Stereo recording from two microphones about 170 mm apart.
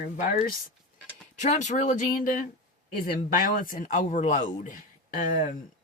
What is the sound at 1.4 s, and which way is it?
Speech, 45° left (ahead or behind).